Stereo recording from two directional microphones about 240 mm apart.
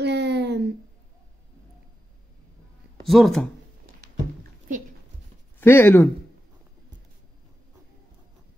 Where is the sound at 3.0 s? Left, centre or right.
Centre.